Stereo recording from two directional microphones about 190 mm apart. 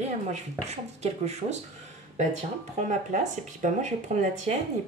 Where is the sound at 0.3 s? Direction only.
35° right (ahead or behind).